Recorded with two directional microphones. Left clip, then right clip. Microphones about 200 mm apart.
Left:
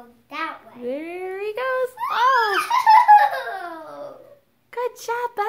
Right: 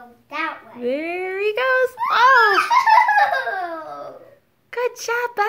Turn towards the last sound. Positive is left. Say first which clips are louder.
# right 4 dB
turn(degrees=-5)  # may be behind; listen again after turning